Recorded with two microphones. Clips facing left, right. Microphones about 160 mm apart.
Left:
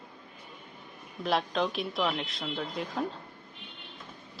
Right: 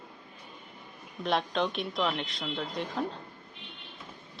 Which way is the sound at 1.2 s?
Centre (ahead or behind).